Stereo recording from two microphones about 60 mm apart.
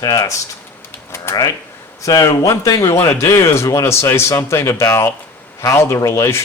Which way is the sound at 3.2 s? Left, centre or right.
Left.